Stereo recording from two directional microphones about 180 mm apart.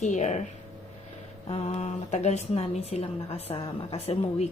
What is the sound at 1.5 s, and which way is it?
Speech, 35° left (ahead or behind).